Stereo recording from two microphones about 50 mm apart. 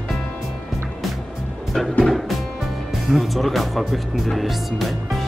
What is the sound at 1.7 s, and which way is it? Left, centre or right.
Music, centre.